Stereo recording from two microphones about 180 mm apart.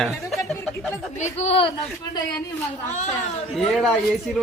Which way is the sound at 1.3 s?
35° left (ahead or behind).